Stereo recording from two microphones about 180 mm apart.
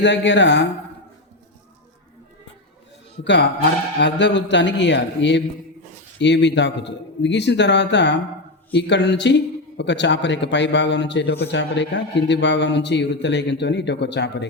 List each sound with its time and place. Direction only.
0.0 s speech: 80° left
3.2 s a man's voice: 75° left (ahead or behind)